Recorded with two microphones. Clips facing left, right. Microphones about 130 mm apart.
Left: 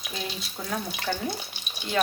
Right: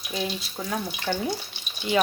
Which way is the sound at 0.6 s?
5° right (ahead or behind).